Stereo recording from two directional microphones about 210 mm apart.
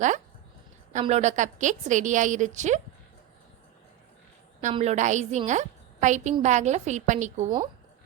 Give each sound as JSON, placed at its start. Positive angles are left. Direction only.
{"t": 0.9, "sound": "a woman's voice", "side_deg": -35}
{"t": 4.6, "sound": "a woman's voice", "side_deg": -30}